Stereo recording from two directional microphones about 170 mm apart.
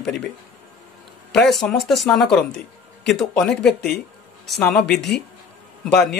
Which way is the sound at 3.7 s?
70° left (ahead or behind).